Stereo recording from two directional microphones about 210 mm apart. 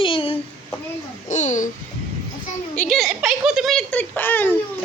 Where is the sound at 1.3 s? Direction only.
35° left (ahead or behind).